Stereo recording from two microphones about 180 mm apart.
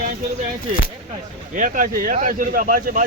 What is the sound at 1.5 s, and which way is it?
Speech, 45° right (ahead or behind).